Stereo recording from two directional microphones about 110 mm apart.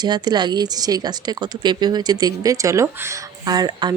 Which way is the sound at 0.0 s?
40° right (ahead or behind).